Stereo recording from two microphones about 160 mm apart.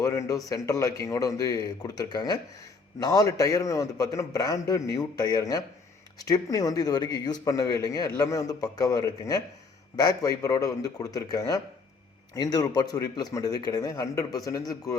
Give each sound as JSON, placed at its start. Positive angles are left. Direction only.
{"t": 0.0, "sound": "a man's voice", "side_deg": 20}